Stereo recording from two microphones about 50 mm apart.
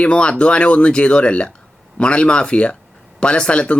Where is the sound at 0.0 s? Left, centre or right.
Left.